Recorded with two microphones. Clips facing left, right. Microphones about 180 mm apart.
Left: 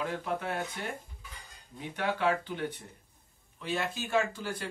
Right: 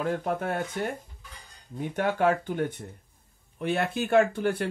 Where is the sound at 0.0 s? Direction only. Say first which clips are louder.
Right 5 dB; 50° right (ahead or behind).